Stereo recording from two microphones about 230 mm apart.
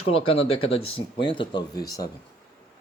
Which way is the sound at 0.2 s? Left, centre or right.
Left.